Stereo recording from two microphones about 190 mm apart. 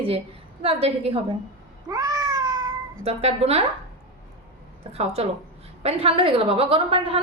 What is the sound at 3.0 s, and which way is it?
Speech, 35° right (ahead or behind).